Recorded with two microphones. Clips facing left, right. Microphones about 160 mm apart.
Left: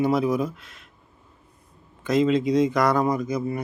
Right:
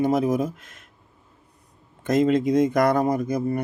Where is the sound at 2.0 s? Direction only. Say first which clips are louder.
Right 1 dB; 50° right (ahead or behind).